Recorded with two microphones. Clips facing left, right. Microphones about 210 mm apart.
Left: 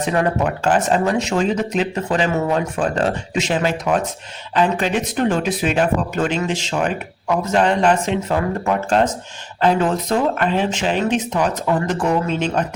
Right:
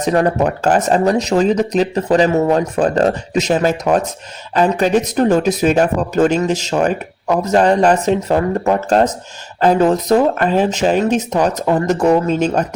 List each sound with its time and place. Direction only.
0.0 s speech: 40° right (ahead or behind)